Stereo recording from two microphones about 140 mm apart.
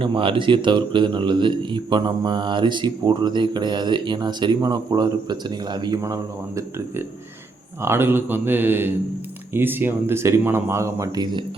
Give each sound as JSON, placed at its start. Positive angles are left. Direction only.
{"t": 0.0, "sound": "speech", "side_deg": -40}